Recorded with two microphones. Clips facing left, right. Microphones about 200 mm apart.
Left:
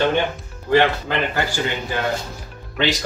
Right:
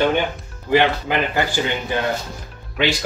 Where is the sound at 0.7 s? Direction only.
15° right (ahead or behind).